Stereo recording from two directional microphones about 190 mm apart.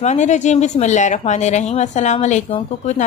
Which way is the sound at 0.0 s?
40° left (ahead or behind).